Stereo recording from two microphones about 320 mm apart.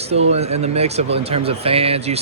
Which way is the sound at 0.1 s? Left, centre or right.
Centre.